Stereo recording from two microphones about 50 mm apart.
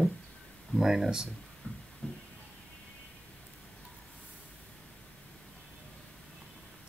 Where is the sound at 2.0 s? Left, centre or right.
Centre.